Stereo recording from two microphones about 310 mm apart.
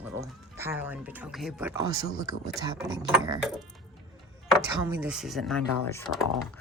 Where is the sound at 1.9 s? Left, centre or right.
Right.